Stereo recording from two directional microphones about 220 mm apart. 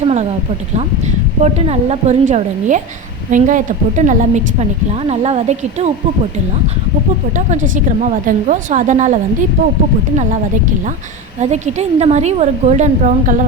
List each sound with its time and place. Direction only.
0.0 s a woman's voice: 30° right (ahead or behind)
1.4 s a woman's voice: 30° right (ahead or behind)
7.3 s a woman's voice: 35° right (ahead or behind)
11.3 s a woman's voice: 30° right (ahead or behind)